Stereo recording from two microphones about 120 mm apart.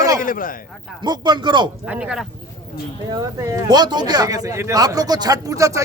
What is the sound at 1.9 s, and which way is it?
Speech, 10° right (ahead or behind).